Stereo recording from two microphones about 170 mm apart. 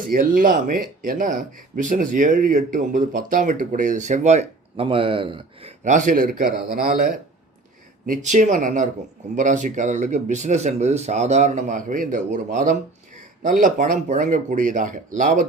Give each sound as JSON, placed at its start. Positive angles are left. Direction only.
{"t": 0.0, "sound": "speech", "side_deg": -55}
{"t": 8.0, "sound": "speech", "side_deg": -50}